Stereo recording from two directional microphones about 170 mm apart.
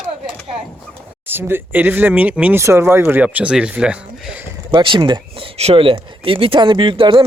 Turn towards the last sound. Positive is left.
turn(degrees=-30)  # may be behind; listen again after turning